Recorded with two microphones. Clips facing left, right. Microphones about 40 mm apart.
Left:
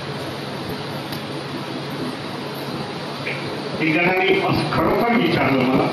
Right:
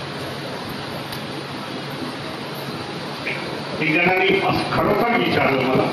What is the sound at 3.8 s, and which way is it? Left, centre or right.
A man's voice, centre.